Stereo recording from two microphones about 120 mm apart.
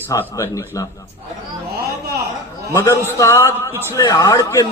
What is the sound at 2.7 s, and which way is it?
A man's voice, 25° left (ahead or behind).